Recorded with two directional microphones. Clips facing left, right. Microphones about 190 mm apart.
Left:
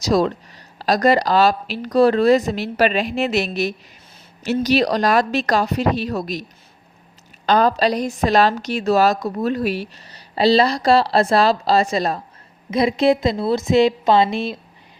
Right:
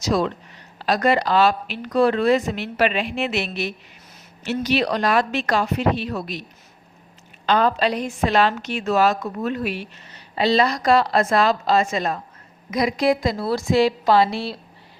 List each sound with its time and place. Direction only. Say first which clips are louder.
0.0 s a woman's voice: left 4 dB; 40° left (ahead or behind)
7.4 s a woman's voice: left 3 dB; 40° left (ahead or behind); by 14.6 s 20° left (ahead or behind)